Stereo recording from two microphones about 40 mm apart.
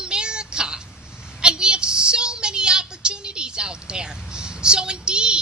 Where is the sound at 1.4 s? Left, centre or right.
Right.